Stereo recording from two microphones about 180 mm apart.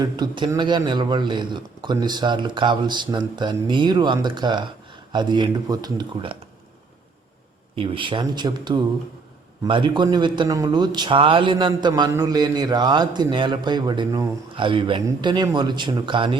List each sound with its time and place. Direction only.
0.0 s a man's voice: 25° right (ahead or behind)
7.8 s a man's voice: 25° right (ahead or behind)